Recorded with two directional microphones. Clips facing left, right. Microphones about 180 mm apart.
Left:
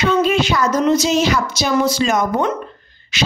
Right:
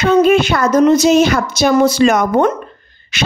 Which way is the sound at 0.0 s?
50° right (ahead or behind).